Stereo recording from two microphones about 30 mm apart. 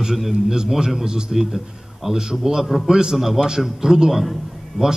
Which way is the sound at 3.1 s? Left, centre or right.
Centre.